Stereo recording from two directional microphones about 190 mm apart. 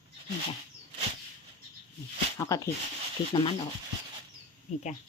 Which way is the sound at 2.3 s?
15° left (ahead or behind).